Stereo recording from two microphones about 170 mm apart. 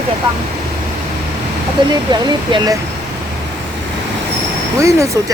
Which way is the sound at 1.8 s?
30° right (ahead or behind).